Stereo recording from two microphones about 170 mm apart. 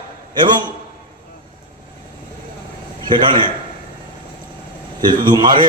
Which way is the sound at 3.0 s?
25° right (ahead or behind).